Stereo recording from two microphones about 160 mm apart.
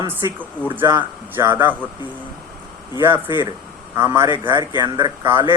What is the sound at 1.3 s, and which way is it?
Speech, 15° right (ahead or behind).